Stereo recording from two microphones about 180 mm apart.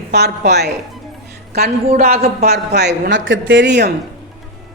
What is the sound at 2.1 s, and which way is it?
Speech, 35° right (ahead or behind).